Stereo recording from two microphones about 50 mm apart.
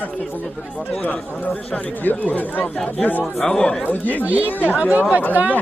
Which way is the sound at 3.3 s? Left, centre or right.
Centre.